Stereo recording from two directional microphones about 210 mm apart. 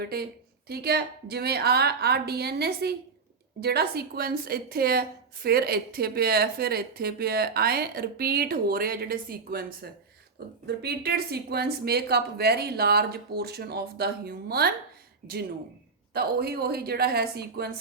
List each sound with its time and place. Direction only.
0.0 s a woman's voice: 50° right (ahead or behind)
16.1 s a woman's voice: 50° right (ahead or behind)